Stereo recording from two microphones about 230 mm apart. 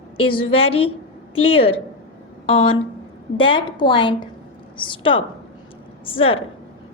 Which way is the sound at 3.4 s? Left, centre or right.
Left.